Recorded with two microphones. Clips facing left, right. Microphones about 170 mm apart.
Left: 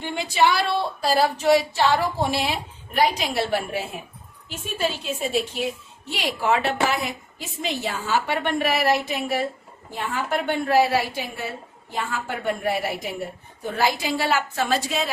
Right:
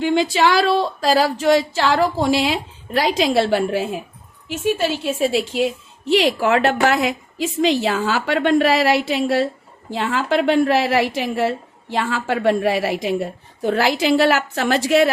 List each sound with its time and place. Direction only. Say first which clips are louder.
0.0 s a woman's voice: right 5 dB; 90° right
4.5 s a woman's voice: right 7 dB; 80° right